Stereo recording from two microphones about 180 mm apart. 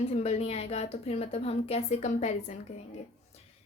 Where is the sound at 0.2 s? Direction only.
35° left (ahead or behind).